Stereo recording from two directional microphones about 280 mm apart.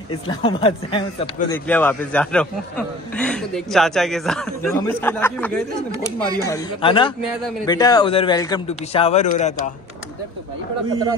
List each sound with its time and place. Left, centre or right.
0.1 s speech: centre
1.7 s a man's voice: centre; by 9.5 s left